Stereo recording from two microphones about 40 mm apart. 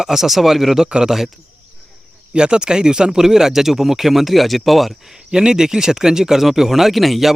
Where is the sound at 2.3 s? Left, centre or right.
Right; by 5.1 s centre.